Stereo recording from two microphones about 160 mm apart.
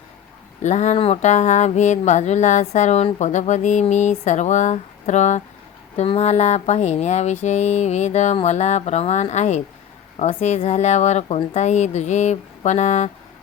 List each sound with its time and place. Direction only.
0.6 s speech: 45° left (ahead or behind)